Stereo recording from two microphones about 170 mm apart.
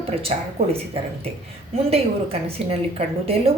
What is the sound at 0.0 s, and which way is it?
Speech, 35° right (ahead or behind).